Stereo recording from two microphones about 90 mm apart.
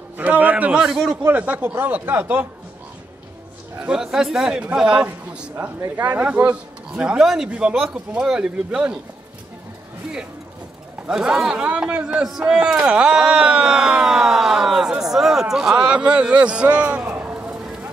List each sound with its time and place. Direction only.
0.2 s speech: 20° right (ahead or behind)
1.1 s speech: 20° right (ahead or behind)
3.8 s speech: 5° right (ahead or behind)
5.6 s speech: 25° right (ahead or behind)
7.2 s speech: 5° right (ahead or behind)
11.1 s speech: 5° right (ahead or behind)